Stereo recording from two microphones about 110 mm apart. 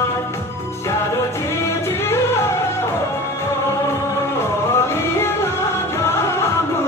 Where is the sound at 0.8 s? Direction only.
25° left (ahead or behind).